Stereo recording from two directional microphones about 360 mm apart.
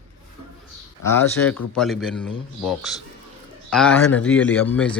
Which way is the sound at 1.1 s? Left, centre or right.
Centre.